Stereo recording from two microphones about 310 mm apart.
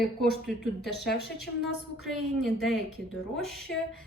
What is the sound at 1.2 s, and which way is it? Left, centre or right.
Speech, left.